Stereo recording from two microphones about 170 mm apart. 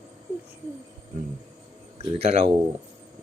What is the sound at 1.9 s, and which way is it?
Speech, 35° right (ahead or behind).